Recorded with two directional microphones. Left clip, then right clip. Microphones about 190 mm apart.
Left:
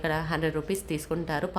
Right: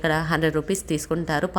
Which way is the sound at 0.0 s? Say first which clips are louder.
Right 6 dB; 20° right (ahead or behind).